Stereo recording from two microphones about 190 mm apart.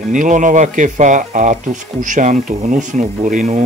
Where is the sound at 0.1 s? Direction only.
40° right (ahead or behind).